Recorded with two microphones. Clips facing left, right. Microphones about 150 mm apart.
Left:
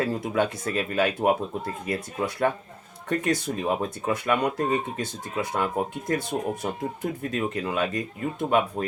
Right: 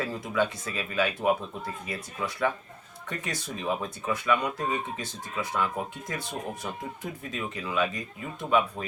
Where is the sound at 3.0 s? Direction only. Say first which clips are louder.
Left 10 dB; 50° left (ahead or behind).